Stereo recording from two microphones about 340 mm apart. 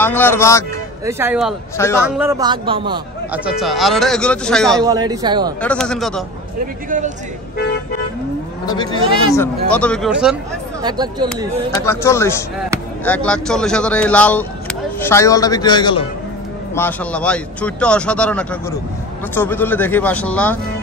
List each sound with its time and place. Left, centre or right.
0.0 s a man's voice: centre
1.0 s speech: centre
3.4 s speech: centre
4.8 s speech: centre
5.6 s speech: centre
8.6 s a man's voice: centre
10.8 s speech: centre
11.7 s a man's voice: centre